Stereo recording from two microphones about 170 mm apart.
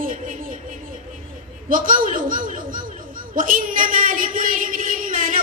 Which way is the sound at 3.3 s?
55° right (ahead or behind).